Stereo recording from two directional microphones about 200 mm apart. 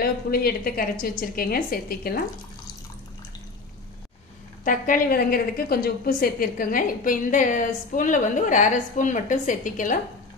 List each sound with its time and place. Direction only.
0.0 s a woman's voice: 50° left (ahead or behind)
4.6 s a woman's voice: 45° left (ahead or behind)